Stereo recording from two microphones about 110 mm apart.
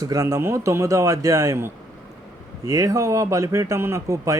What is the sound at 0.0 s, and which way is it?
Speech, 35° right (ahead or behind).